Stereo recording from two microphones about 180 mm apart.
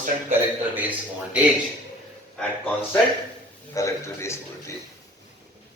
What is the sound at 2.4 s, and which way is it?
A man's voice, 10° left (ahead or behind).